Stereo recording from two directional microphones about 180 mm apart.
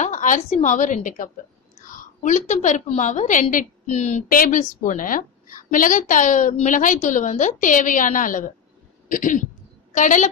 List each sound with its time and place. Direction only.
0.0 s a woman's voice: 45° left (ahead or behind)